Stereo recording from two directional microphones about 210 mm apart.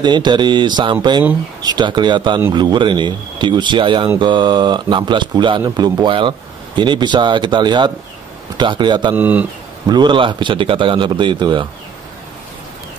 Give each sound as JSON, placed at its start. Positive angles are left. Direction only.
{"t": 0.0, "sound": "speech", "side_deg": -20}
{"t": 9.1, "sound": "speech", "side_deg": -10}
{"t": 9.8, "sound": "speech", "side_deg": -20}